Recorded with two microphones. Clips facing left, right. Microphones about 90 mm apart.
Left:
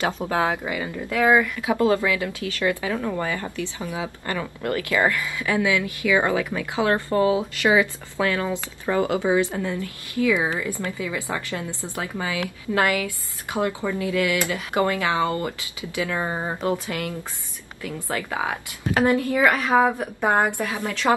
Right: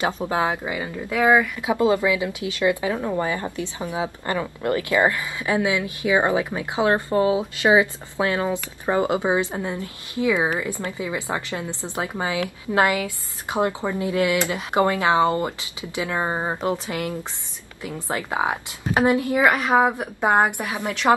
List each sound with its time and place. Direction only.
0.3 s a woman's voice: 20° right (ahead or behind)